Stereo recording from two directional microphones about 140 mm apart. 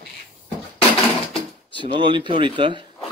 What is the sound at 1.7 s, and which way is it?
Speech, 35° right (ahead or behind).